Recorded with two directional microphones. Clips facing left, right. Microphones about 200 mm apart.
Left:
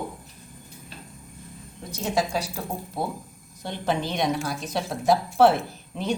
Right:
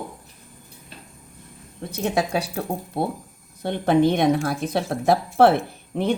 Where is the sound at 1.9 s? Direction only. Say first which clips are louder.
Right 3 dB; 60° right (ahead or behind).